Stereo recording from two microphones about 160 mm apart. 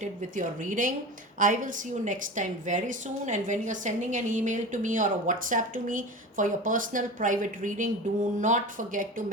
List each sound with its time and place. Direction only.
0.0 s a woman's voice: 50° right (ahead or behind)